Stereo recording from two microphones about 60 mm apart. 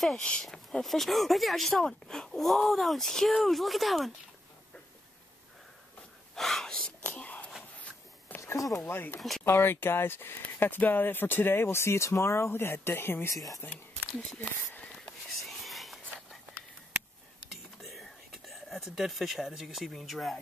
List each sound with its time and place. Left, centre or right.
0.0 s speech: centre
6.3 s speech: centre
7.1 s whispering: left
8.4 s speech: left
8.8 s speech: left
13.3 s speech: left
14.1 s speech: centre
15.0 s whispering: centre
17.8 s whispering: centre
18.9 s speech: centre